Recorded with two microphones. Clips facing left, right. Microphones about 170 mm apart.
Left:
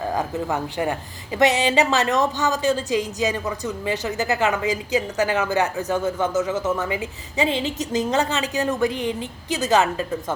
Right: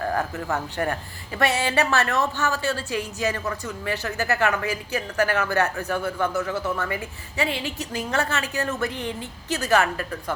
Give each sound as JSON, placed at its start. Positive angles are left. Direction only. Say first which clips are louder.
{"t": 0.0, "sound": "speech", "louder": "left 2 dB", "side_deg": 15}